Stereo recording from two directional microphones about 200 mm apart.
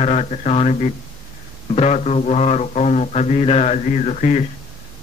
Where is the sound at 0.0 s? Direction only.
30° left (ahead or behind).